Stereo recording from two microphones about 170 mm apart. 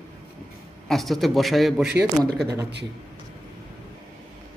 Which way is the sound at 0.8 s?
Centre (ahead or behind).